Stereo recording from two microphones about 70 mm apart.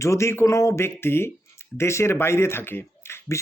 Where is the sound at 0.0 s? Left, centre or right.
Left.